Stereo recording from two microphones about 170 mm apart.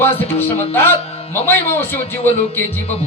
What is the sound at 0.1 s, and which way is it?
Speech, 35° left (ahead or behind).